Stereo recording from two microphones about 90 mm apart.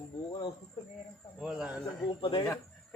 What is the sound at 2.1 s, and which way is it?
Speech, 70° left (ahead or behind).